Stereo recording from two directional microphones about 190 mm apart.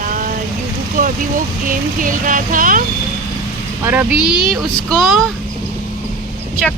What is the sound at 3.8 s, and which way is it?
Speech, 10° right (ahead or behind).